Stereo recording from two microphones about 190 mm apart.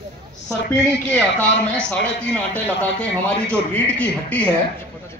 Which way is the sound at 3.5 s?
5° left (ahead or behind).